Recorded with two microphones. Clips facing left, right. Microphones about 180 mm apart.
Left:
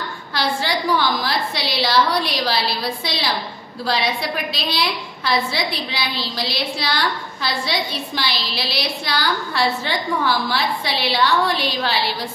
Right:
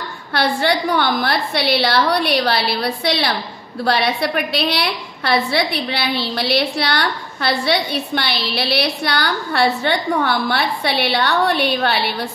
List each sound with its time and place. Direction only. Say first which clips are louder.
0.3 s a woman's voice: right 5 dB; 60° right (ahead or behind)